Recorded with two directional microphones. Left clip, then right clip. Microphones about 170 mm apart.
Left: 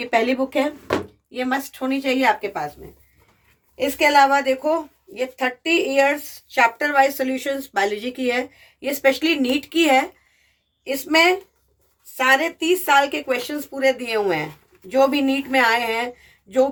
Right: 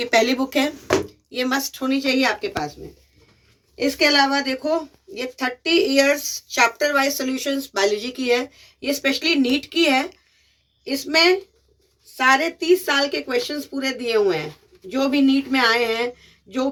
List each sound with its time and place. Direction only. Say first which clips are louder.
0.0 s a woman's voice: right 1 dB; 30° left (ahead or behind)
3.9 s a woman's voice: left 3 dB; 35° left (ahead or behind)